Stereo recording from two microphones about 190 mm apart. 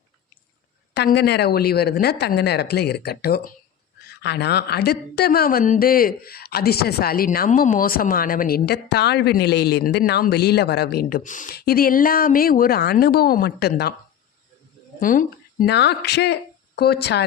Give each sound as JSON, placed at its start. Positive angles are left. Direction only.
{"t": 0.9, "sound": "a woman's voice", "side_deg": 60}
{"t": 15.0, "sound": "speech", "side_deg": 45}
{"t": 15.7, "sound": "speech", "side_deg": 60}